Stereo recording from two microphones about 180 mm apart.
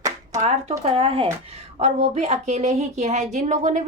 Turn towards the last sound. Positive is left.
turn(degrees=-45)  # may be behind; listen again after turning